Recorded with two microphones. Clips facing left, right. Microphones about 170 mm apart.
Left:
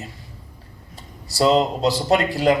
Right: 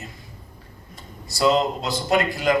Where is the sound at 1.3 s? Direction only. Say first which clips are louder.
Left 2 dB; 35° left (ahead or behind).